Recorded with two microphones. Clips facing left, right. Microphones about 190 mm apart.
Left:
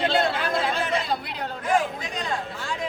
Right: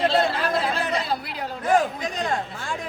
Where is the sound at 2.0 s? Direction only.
45° right (ahead or behind).